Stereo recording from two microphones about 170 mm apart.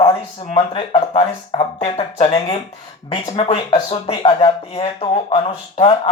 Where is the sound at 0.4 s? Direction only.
30° left (ahead or behind).